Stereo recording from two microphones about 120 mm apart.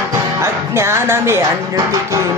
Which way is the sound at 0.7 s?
20° right (ahead or behind).